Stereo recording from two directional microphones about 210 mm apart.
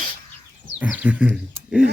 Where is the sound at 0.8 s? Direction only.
5° right (ahead or behind).